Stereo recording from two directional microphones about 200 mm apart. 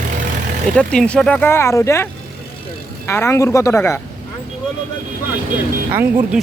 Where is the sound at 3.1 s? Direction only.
15° left (ahead or behind).